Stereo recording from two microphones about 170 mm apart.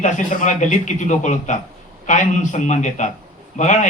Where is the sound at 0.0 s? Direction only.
45° left (ahead or behind).